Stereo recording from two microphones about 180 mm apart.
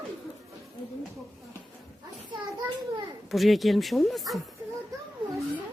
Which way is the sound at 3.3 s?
Centre (ahead or behind).